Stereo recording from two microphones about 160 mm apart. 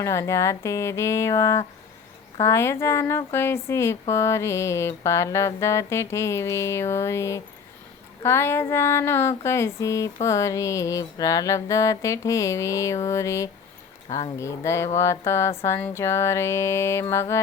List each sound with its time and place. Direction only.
0.0 s music: 20° left (ahead or behind)